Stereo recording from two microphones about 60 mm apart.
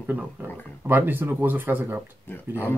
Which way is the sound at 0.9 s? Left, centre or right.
Right.